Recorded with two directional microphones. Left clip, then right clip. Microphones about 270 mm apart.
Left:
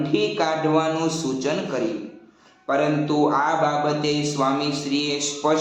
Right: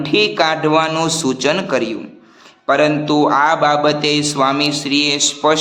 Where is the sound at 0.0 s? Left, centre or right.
Right.